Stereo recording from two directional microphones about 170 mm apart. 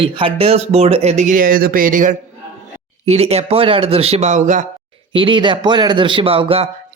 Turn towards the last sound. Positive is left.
turn(degrees=-35)  # may be behind; listen again after turning